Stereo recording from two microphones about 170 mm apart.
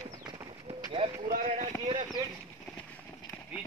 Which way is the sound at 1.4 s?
35° right (ahead or behind).